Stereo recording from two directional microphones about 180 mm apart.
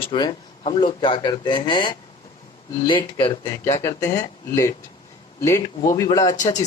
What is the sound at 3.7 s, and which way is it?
Speech, 20° left (ahead or behind).